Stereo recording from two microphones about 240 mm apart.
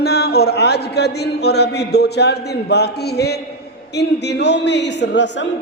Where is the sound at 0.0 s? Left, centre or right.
Left.